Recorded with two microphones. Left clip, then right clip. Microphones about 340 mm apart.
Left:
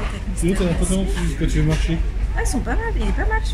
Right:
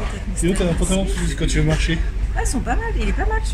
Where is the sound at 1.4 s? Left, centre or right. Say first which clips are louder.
Right 2 dB; right.